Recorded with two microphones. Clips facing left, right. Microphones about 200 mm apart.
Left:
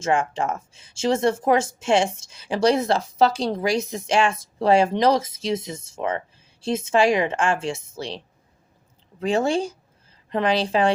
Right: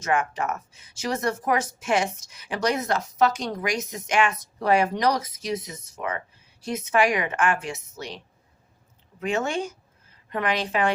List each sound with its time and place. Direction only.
0.0 s speech: 30° left (ahead or behind)
9.2 s a woman's voice: 30° left (ahead or behind)